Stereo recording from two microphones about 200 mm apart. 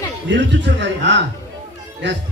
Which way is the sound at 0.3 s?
60° right (ahead or behind).